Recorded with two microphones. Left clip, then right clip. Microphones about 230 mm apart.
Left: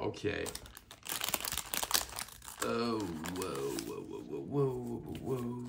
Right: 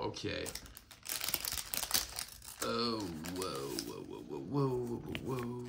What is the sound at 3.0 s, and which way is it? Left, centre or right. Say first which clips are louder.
Speech: left 3 dB; left.